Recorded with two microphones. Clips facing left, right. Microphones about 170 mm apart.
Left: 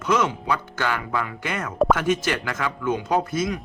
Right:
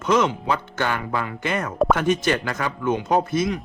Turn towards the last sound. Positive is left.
turn(degrees=-25)  # may be behind; listen again after turning